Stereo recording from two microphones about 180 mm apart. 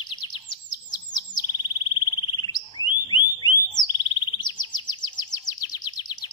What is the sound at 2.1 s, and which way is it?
Frog, 20° left (ahead or behind).